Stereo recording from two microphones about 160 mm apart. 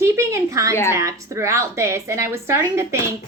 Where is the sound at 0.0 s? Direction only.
20° right (ahead or behind).